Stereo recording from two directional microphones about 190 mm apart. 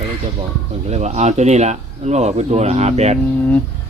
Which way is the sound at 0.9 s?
35° right (ahead or behind).